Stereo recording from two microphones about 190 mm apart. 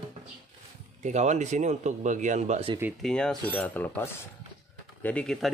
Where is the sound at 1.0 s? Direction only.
40° right (ahead or behind).